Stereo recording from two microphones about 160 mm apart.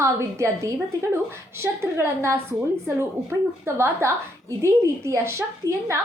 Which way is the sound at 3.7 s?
15° right (ahead or behind).